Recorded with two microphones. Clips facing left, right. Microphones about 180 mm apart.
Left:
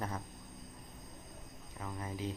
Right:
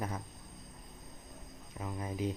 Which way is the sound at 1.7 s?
15° right (ahead or behind).